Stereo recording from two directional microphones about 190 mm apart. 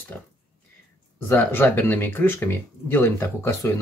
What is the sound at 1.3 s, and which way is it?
Speech, 10° left (ahead or behind).